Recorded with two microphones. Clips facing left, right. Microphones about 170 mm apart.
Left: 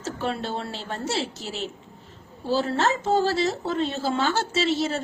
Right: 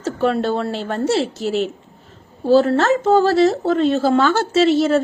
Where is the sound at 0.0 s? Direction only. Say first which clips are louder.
Right 10 dB; 60° right (ahead or behind).